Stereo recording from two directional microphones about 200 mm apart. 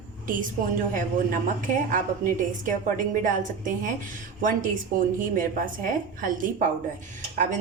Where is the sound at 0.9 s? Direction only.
40° right (ahead or behind).